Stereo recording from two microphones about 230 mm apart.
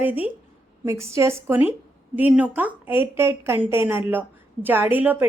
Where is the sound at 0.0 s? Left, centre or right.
Centre.